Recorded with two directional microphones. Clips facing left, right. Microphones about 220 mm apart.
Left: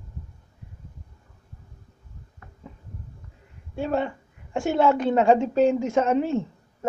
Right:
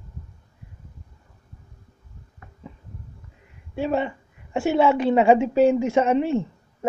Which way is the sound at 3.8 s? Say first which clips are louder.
Right 2 dB; 5° right (ahead or behind).